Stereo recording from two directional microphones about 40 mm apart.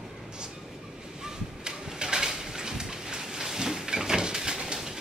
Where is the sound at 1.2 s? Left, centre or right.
Centre.